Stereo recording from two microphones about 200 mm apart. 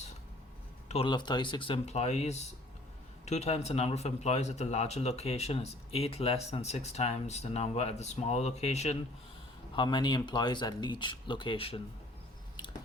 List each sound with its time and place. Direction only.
0.9 s speech: 25° left (ahead or behind)
9.7 s speech: 25° left (ahead or behind)